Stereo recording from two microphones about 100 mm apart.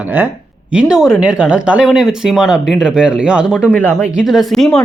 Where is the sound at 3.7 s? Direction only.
15° left (ahead or behind).